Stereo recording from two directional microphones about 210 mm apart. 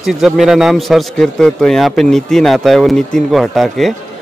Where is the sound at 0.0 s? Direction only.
Centre (ahead or behind).